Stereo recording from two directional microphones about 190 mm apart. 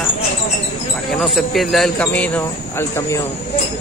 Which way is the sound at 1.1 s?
Centre (ahead or behind).